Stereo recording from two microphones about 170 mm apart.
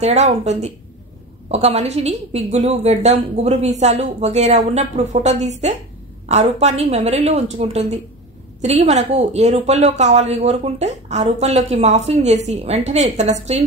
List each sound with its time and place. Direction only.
0.0 s a woman's voice: 40° right (ahead or behind)